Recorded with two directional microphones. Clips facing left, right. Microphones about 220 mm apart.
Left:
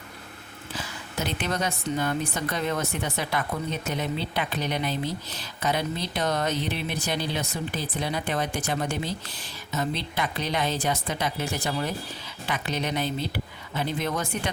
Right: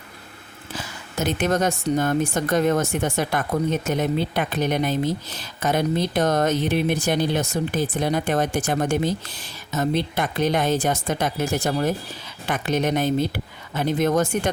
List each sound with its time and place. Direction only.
1.2 s speech: 45° right (ahead or behind)